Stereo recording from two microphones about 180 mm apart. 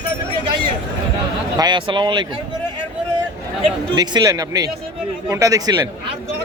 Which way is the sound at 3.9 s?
25° right (ahead or behind).